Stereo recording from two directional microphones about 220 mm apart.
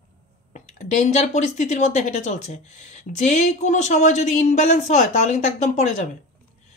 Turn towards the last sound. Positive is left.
turn(degrees=35)  # may be behind; listen again after turning